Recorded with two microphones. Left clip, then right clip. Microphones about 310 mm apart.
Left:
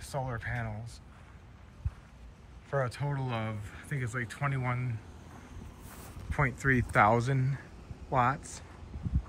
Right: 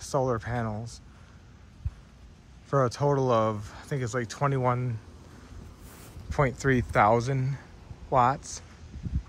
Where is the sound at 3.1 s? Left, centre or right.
Centre.